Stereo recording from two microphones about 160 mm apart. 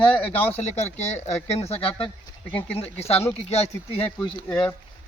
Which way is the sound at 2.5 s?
10° left (ahead or behind).